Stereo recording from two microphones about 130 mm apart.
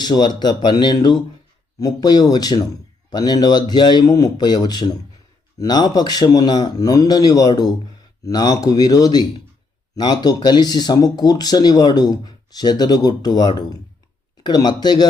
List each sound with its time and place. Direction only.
0.0 s speech: 35° left (ahead or behind)